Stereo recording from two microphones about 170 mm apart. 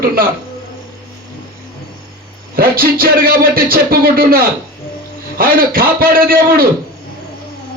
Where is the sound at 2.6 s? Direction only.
60° right (ahead or behind).